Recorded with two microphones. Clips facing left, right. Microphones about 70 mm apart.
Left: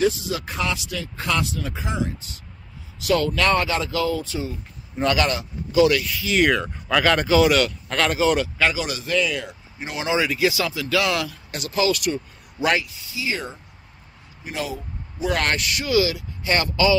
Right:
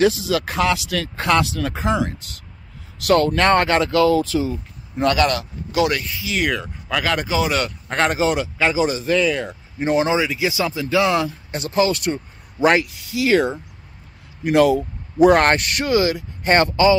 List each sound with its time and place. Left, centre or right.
0.0 s speech: right
5.0 s speech: right
5.9 s speech: right
6.2 s speech: centre
7.2 s speech: centre
7.6 s speech: right
8.3 s speech: centre
10.1 s speech: centre; by 12.8 s right
12.8 s speech: right
15.2 s speech: right